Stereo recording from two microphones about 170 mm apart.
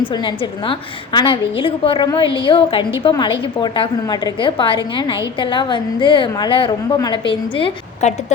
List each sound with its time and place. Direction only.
0.0 s a woman's voice: 30° left (ahead or behind)